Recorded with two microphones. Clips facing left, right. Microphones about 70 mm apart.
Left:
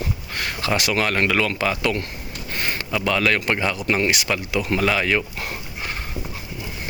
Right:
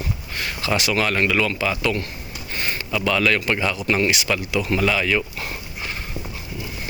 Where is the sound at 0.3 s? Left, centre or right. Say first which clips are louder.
Left 2 dB; left.